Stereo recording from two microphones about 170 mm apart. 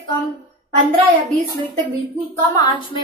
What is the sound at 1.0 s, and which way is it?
Speech, 20° right (ahead or behind).